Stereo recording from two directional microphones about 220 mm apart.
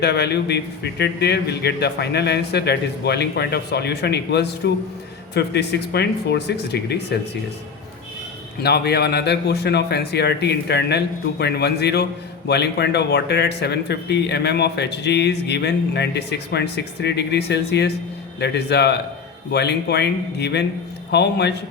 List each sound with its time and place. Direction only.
0.0 s speech: 50° left (ahead or behind)
8.6 s speech: 50° left (ahead or behind)